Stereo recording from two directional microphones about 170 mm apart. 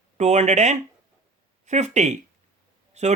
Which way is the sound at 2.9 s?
40° right (ahead or behind).